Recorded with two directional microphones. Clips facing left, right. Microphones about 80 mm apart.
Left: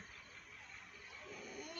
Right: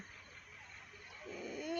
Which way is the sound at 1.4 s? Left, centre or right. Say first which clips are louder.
Right 7 dB; right.